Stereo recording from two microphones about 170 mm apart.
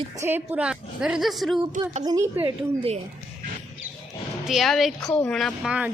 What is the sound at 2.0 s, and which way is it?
Speech, 25° right (ahead or behind).